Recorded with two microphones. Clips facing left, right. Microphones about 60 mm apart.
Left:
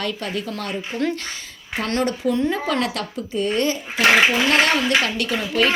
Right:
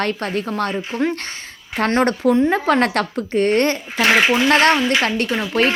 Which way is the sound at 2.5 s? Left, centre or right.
Right.